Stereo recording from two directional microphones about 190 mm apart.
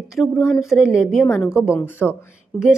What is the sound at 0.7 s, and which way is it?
Speech, 5° right (ahead or behind).